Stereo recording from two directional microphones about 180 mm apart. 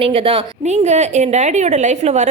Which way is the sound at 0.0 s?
30° right (ahead or behind).